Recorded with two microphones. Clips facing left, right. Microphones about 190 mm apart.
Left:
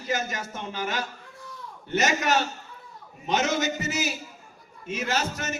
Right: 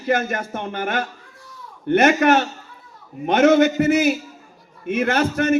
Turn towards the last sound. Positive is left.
turn(degrees=-55)  # may be behind; listen again after turning